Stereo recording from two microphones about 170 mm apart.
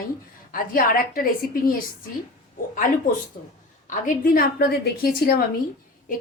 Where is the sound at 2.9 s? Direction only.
50° left (ahead or behind).